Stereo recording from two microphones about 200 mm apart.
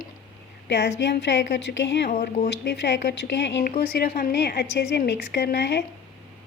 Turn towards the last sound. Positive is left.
turn(degrees=55)  # may be behind; listen again after turning